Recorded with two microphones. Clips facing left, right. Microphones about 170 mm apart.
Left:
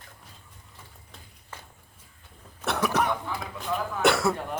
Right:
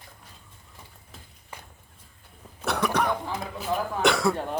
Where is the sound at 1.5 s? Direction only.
15° right (ahead or behind).